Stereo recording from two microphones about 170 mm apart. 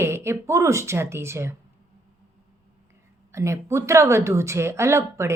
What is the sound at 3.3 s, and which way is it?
Speech, 15° right (ahead or behind).